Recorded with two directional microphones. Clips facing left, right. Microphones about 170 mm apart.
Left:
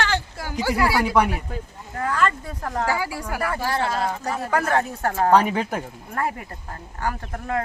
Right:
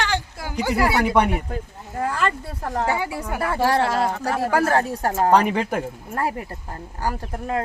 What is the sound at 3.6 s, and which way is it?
Speech, 70° right (ahead or behind).